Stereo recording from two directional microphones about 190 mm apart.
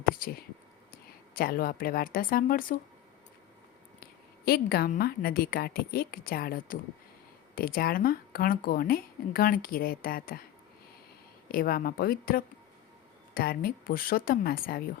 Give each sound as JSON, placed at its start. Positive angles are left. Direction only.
{"t": 0.0, "sound": "speech", "side_deg": 50}
{"t": 4.0, "sound": "speech", "side_deg": 55}
{"t": 11.4, "sound": "speech", "side_deg": 50}